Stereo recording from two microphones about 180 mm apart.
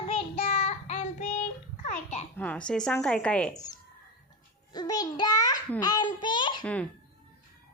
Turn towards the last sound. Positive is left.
turn(degrees=25)  # may be behind; listen again after turning